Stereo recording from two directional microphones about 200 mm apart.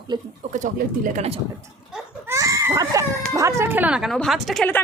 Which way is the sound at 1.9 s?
5° right (ahead or behind).